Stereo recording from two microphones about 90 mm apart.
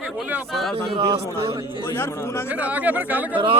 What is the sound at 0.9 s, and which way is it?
Speech, 90° right.